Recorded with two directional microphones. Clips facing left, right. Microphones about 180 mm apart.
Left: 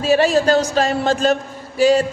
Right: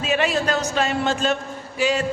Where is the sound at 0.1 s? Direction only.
35° left (ahead or behind).